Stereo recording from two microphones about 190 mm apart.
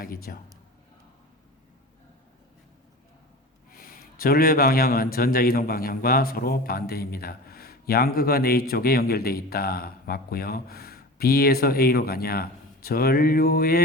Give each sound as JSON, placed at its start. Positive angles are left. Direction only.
{"t": 0.3, "sound": "a man's voice", "side_deg": 50}
{"t": 3.7, "sound": "a man's voice", "side_deg": 50}